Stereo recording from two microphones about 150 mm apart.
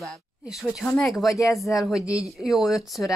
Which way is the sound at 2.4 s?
Centre (ahead or behind).